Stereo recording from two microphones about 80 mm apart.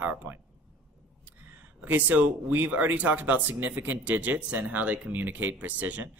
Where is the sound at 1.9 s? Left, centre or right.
Right.